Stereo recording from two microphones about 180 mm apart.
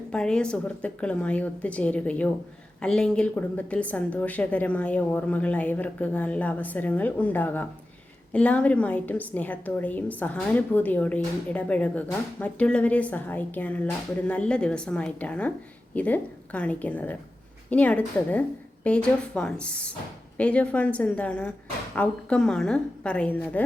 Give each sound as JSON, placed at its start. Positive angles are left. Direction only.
{"t": 0.1, "sound": "a woman's voice", "side_deg": 5}